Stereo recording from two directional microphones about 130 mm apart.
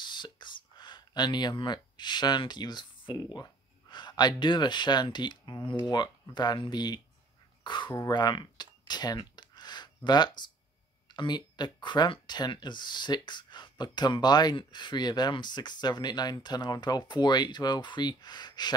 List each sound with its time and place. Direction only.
0.0 s speech: 35° left (ahead or behind)
8.1 s clicking: 30° left (ahead or behind)
11.1 s speech: 35° left (ahead or behind)